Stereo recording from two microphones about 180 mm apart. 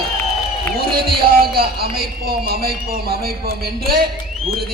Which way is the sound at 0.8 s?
60° right (ahead or behind).